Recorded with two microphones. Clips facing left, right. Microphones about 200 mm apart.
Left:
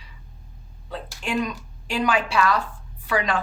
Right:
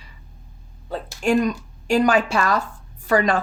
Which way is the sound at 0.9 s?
45° right (ahead or behind).